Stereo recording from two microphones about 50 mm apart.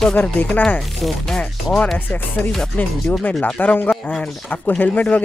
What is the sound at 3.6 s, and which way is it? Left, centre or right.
Speech, left.